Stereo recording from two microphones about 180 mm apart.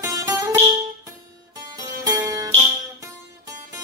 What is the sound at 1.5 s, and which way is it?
Music, 20° right (ahead or behind).